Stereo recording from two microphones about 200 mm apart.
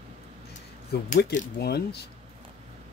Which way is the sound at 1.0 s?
45° left (ahead or behind).